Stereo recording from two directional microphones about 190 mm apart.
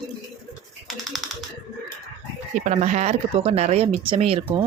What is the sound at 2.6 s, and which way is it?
Speech, 40° right (ahead or behind).